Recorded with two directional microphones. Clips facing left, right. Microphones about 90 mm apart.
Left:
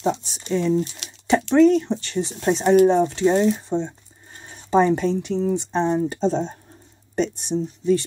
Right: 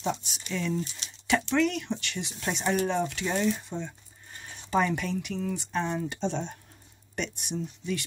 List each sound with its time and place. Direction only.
0.0 s speech: 35° left (ahead or behind)